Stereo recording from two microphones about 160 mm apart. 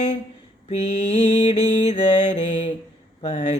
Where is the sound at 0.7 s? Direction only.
40° left (ahead or behind).